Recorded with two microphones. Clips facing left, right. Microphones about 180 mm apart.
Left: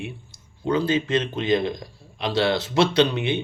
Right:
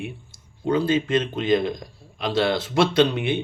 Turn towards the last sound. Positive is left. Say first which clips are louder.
# right 1 dB
turn(degrees=-50)  # may be behind; listen again after turning